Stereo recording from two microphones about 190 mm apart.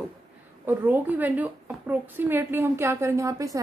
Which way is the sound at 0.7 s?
10° right (ahead or behind).